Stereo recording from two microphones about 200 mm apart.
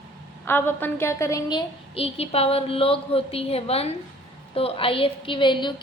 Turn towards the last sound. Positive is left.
turn(degrees=25)  # may be behind; listen again after turning